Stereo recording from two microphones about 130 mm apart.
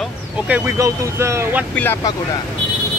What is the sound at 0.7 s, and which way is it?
Speech, 20° right (ahead or behind).